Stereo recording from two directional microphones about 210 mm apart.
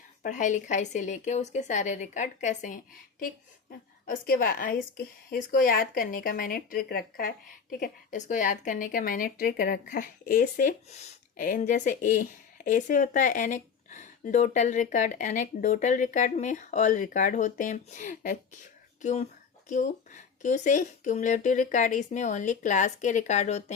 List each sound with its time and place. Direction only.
0.2 s a woman's voice: 35° left (ahead or behind)
19.6 s speech: 35° left (ahead or behind)